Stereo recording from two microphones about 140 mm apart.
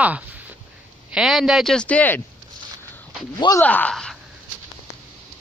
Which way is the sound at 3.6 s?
10° left (ahead or behind).